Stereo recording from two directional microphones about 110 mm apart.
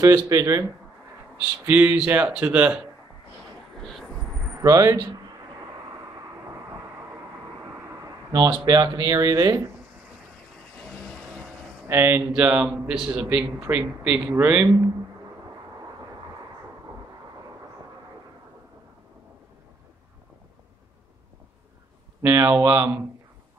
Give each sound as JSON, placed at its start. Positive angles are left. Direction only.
{"t": 0.0, "sound": "speech", "side_deg": -30}
{"t": 1.7, "sound": "a man's voice", "side_deg": -20}
{"t": 4.5, "sound": "a sound", "side_deg": -30}
{"t": 7.7, "sound": "a sound", "side_deg": -25}
{"t": 8.4, "sound": "speech", "side_deg": -40}
{"t": 10.9, "sound": "vehicle", "side_deg": 0}
{"t": 11.9, "sound": "a man's voice", "side_deg": -20}
{"t": 22.2, "sound": "speech", "side_deg": -30}